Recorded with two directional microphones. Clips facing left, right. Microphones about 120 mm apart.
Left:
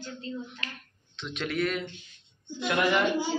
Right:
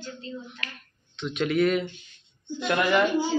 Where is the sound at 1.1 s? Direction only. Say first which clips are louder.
Right 7 dB; centre (ahead or behind).